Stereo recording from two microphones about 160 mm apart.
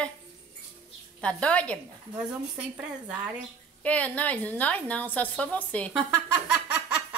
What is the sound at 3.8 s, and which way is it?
A woman's voice, 10° left (ahead or behind).